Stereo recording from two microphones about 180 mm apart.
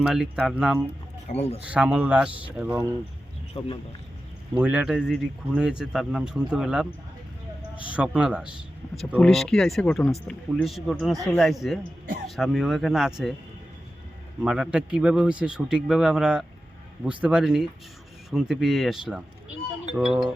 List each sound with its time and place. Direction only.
0.0 s speech: 5° right (ahead or behind)
1.3 s speech: 35° left (ahead or behind)
1.6 s speech: 5° right (ahead or behind)
3.6 s speech: 30° left (ahead or behind)
4.5 s speech: 5° right (ahead or behind)
7.9 s speech: 5° right (ahead or behind)
14.4 s speech: 5° right (ahead or behind)